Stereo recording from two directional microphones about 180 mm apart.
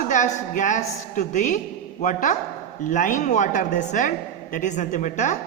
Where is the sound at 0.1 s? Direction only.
45° left (ahead or behind).